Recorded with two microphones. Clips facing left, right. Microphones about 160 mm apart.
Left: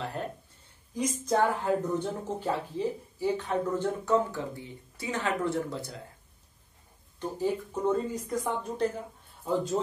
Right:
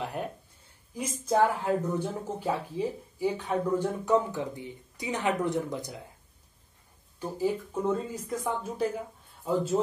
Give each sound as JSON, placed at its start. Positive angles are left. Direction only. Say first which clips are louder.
{"t": 0.0, "sound": "a sound", "louder": "right 1 dB", "side_deg": -15}
{"t": 0.9, "sound": "speech", "louder": "right 1 dB", "side_deg": -5}
{"t": 7.2, "sound": "speech", "louder": "right 1 dB", "side_deg": -5}